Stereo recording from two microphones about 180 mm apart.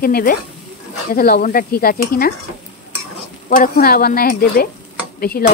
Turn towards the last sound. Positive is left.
turn(degrees=55)  # may be behind; listen again after turning